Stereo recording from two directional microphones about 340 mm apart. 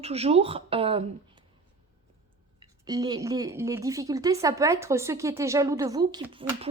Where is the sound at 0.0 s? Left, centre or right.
Centre.